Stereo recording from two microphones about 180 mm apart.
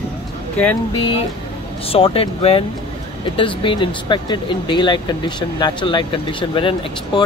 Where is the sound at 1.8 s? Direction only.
30° left (ahead or behind).